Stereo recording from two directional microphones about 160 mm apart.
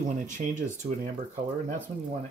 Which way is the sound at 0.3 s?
50° right (ahead or behind).